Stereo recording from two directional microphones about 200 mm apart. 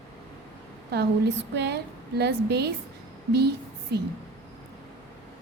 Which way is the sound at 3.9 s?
55° right (ahead or behind).